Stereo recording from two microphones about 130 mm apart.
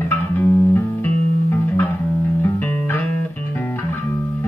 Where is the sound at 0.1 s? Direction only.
20° left (ahead or behind).